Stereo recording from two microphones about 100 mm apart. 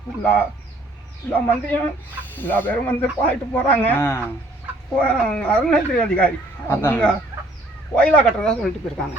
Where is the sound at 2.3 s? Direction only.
20° left (ahead or behind).